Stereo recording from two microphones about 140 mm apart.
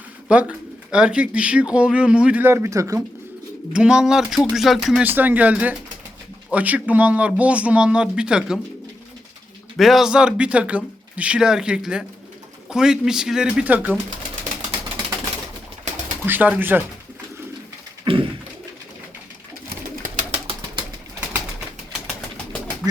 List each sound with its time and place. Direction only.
0.3 s speech: 10° right (ahead or behind)
3.7 s speech: 5° right (ahead or behind)
5.0 s speech: 15° right (ahead or behind)
9.7 s speech: centre (ahead or behind)
16.2 s speech: 15° right (ahead or behind)
18.0 s pigeon: 35° right (ahead or behind)
20.0 s bird: 65° right (ahead or behind)